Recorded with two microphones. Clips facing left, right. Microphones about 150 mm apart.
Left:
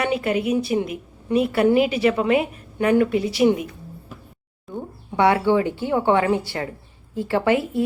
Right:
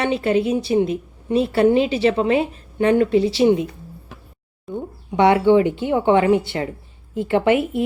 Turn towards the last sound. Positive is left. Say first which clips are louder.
# right 2 dB
turn(degrees=-20)  # may be behind; listen again after turning